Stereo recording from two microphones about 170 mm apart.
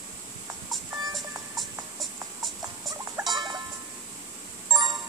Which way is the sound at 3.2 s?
20° right (ahead or behind).